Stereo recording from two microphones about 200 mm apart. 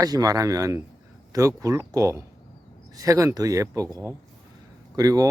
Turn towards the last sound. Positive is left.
turn(degrees=-15)  # may be behind; listen again after turning